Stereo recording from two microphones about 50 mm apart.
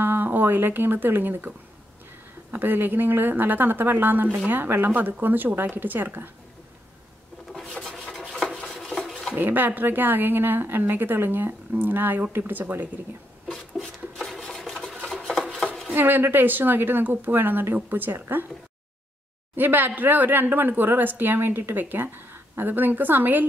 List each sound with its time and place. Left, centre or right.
0.0 s speech: right
2.5 s a woman's voice: right
7.8 s a sound: centre
8.6 s cutlery: centre
9.3 s a woman's voice: right
13.7 s a sound: centre
15.5 s dishes: centre
15.9 s a woman's voice: right
19.5 s a woman's voice: right